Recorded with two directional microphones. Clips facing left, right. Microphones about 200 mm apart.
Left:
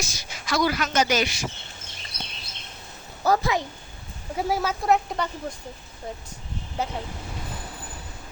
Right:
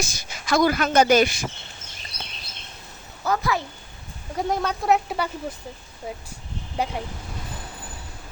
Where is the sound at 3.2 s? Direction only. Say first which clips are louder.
Left 3 dB; 35° left (ahead or behind).